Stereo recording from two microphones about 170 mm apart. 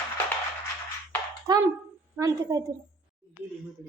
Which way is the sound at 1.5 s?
20° right (ahead or behind).